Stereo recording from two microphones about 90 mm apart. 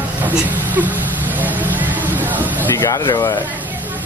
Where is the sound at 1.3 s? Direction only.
20° right (ahead or behind).